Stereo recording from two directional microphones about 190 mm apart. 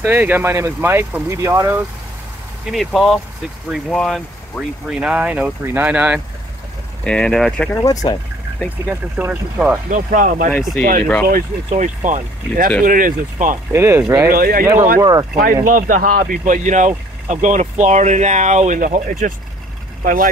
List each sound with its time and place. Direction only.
0.0 s speech: 10° right (ahead or behind)
2.6 s speech: centre (ahead or behind)
7.1 s speech: 5° left (ahead or behind)
7.7 s speech: 20° left (ahead or behind)
8.8 s speech: 10° right (ahead or behind)
9.8 s speech: 45° right (ahead or behind)
13.7 s speech: 10° right (ahead or behind)
14.3 s speech: 50° right (ahead or behind)
15.0 s speech: 20° right (ahead or behind)
15.6 s speech: 45° right (ahead or behind)